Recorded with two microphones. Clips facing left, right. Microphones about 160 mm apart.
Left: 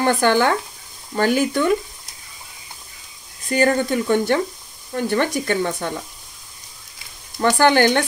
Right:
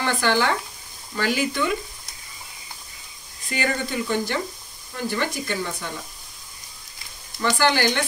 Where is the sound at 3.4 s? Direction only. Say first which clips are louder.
Left 8 dB; 45° left (ahead or behind).